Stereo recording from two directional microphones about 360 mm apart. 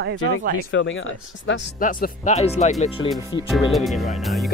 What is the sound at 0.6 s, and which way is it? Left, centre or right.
Speech, left.